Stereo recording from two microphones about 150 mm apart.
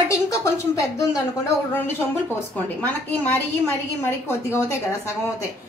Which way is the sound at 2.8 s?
10° left (ahead or behind).